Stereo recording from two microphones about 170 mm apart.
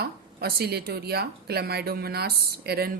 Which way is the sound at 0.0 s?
65° right (ahead or behind).